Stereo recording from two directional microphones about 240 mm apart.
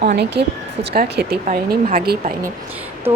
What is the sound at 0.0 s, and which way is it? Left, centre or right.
Speech, right.